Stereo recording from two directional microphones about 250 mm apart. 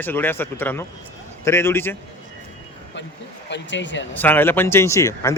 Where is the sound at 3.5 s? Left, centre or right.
Left.